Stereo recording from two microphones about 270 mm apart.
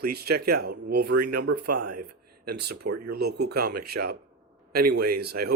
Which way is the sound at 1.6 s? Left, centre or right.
Right.